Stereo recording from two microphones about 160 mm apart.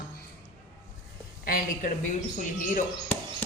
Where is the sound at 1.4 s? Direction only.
65° left (ahead or behind).